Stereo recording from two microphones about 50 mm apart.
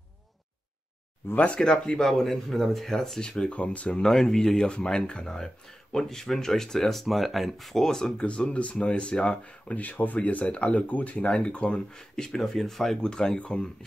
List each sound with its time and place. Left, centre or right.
1.3 s speech: left
1.6 s speech: centre
2.0 s speech: centre; by 4.0 s left
4.0 s speech: centre
8.2 s speech: left; by 13.0 s centre
13.0 s speech: centre